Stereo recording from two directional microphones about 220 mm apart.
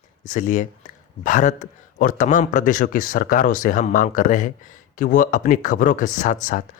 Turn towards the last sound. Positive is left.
turn(degrees=35)  # may be behind; listen again after turning